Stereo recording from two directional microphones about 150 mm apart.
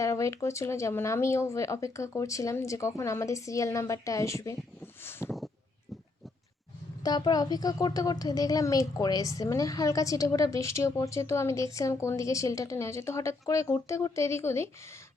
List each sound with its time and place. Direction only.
0.0 s a woman's voice: 20° left (ahead or behind)
5.2 s a sound: 20° left (ahead or behind)
7.0 s a woman's voice: 25° left (ahead or behind)